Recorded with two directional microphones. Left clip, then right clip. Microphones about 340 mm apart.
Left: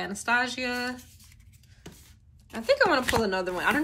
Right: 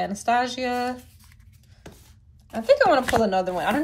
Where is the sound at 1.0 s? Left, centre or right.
Right.